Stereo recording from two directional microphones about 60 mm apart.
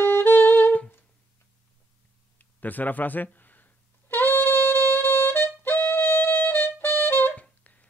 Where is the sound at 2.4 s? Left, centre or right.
Left.